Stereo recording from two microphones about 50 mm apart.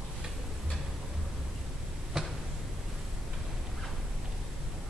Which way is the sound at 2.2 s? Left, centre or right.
Centre.